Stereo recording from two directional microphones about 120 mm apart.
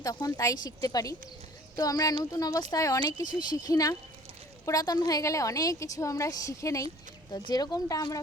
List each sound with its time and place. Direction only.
0.0 s a woman's voice: 30° left (ahead or behind)